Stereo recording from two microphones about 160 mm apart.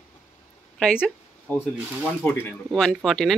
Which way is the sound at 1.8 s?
10° right (ahead or behind).